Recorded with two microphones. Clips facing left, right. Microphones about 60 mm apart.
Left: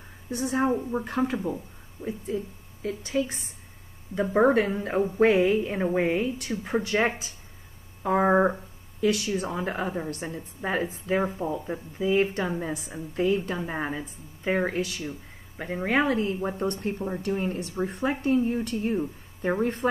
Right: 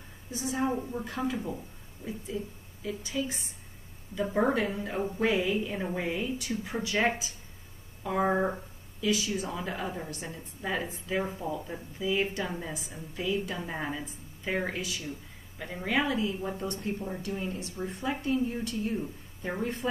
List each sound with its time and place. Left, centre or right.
0.3 s a woman's voice: left
9.0 s a woman's voice: left
9.5 s a woman's voice: left
14.8 s a woman's voice: left